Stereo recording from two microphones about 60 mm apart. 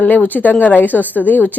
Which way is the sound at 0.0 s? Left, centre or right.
Left.